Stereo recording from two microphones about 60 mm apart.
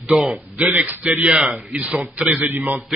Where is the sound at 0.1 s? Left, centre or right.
Centre.